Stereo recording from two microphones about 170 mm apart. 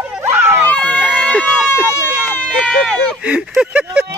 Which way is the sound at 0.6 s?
10° left (ahead or behind).